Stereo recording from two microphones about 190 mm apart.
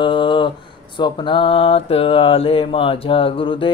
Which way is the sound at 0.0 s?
25° left (ahead or behind).